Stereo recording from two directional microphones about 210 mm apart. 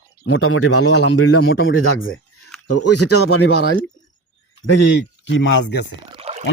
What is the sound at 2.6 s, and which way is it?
Speech, 90° left.